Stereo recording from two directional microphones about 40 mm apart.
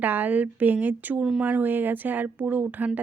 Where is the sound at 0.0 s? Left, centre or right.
Right.